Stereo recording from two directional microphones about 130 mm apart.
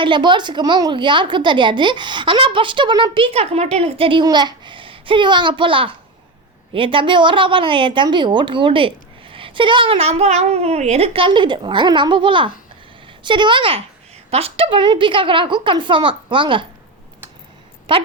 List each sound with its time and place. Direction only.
0.0 s a woman's voice: 35° right (ahead or behind)